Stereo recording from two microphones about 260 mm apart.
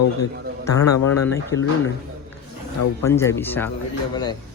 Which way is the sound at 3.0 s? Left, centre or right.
Centre.